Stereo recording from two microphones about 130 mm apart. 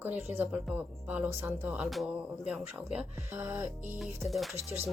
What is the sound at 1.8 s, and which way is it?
Speech, centre (ahead or behind).